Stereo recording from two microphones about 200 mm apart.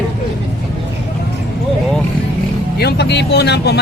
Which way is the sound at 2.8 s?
55° left (ahead or behind).